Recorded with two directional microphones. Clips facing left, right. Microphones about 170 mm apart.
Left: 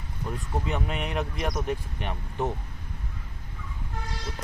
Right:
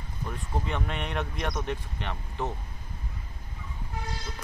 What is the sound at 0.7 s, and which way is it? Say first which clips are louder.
Speech: left 4 dB; 5° left (ahead or behind).